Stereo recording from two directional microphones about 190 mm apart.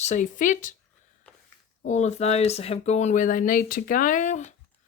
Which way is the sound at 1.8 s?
40° left (ahead or behind).